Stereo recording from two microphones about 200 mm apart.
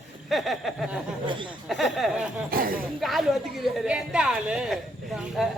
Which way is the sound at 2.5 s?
45° right (ahead or behind).